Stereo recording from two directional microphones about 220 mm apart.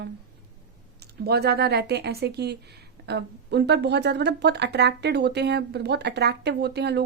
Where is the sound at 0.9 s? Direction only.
45° right (ahead or behind).